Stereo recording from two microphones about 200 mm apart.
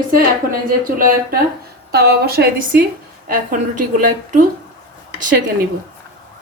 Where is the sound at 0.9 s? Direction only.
45° right (ahead or behind).